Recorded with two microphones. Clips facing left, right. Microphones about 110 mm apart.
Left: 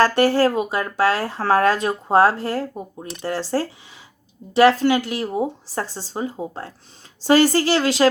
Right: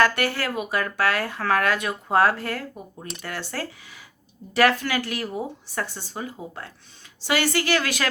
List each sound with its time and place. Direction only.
0.0 s speech: 35° left (ahead or behind)